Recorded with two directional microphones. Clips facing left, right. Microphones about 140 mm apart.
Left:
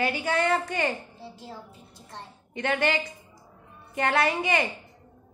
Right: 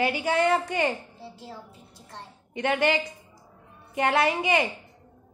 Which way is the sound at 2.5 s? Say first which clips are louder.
Right 2 dB; 20° right (ahead or behind).